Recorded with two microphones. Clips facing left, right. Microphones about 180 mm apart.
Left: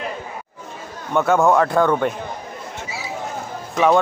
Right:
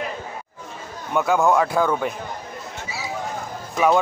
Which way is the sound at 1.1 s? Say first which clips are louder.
Left 3 dB; centre (ahead or behind).